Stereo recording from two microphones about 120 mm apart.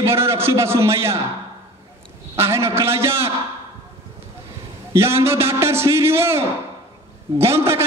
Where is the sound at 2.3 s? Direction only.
20° right (ahead or behind).